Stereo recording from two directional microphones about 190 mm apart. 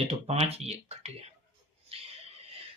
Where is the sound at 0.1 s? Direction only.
35° right (ahead or behind).